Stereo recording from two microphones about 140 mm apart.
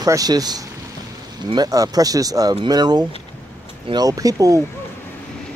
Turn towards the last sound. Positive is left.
turn(degrees=-25)  # may be behind; listen again after turning